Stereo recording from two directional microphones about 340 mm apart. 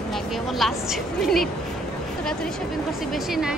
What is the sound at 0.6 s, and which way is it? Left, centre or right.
Speech, centre.